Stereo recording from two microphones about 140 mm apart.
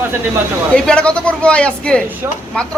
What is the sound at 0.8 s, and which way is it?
A man's voice, 5° left (ahead or behind).